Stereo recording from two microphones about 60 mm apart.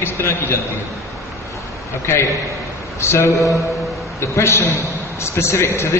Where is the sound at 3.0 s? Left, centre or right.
Left.